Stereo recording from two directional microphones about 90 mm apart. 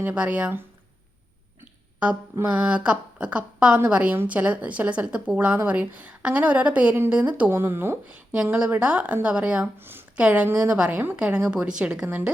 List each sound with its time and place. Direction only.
0.0 s a woman's voice: 15° right (ahead or behind)
2.5 s a woman's voice: 15° right (ahead or behind)
7.5 s speech: 25° right (ahead or behind)
8.0 s a woman's voice: 15° right (ahead or behind)